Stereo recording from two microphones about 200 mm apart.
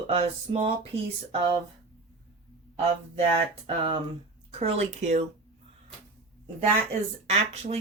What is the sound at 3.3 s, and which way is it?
Speech, 25° right (ahead or behind).